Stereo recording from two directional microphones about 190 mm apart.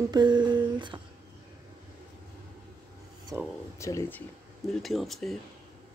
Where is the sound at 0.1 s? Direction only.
20° right (ahead or behind).